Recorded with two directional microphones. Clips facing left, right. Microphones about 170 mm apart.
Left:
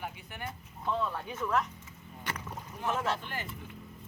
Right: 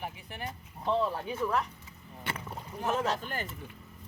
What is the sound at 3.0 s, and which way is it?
Speech, 40° right (ahead or behind).